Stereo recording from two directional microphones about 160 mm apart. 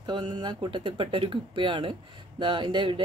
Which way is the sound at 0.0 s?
30° right (ahead or behind).